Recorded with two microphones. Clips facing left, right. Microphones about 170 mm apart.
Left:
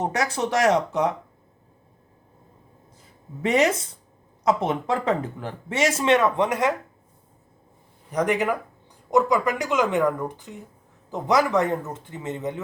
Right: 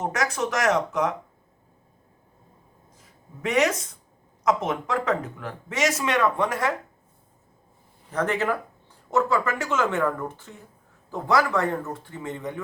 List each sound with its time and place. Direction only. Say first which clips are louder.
0.0 s speech: left 1 dB; 30° left (ahead or behind)
3.0 s speech: left 4 dB; 30° left (ahead or behind)
8.1 s speech: left 2 dB; 15° left (ahead or behind)